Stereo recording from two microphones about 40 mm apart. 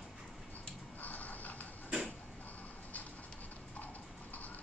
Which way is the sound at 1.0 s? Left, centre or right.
Left.